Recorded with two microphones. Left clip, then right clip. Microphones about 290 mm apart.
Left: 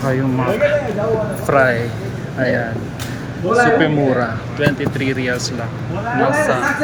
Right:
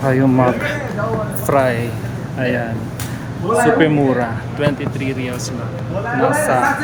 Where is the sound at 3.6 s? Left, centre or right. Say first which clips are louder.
Right 1 dB; centre.